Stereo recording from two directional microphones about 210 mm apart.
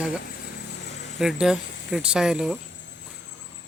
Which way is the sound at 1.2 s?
Centre (ahead or behind).